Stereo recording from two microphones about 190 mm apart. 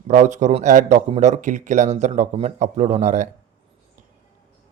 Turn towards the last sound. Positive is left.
turn(degrees=-40)  # may be behind; listen again after turning